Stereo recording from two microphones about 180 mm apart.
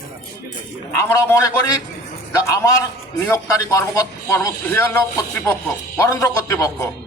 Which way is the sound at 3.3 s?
15° left (ahead or behind).